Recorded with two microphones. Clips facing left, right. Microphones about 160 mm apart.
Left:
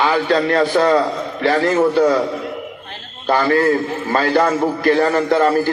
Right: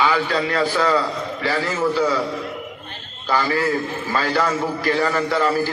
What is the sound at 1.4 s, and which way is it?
Speech, 60° left (ahead or behind).